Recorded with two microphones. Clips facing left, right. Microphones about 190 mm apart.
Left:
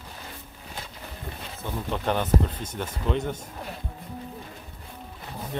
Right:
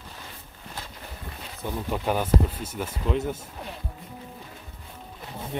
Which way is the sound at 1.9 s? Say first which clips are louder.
Even; 5° right (ahead or behind).